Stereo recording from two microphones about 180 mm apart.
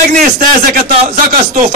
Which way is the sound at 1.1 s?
45° right (ahead or behind).